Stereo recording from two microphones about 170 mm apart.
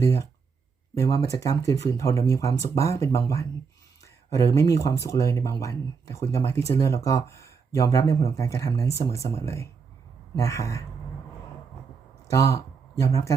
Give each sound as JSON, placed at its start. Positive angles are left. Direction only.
{"t": 0.0, "sound": "speech", "side_deg": 15}
{"t": 12.3, "sound": "speech", "side_deg": 20}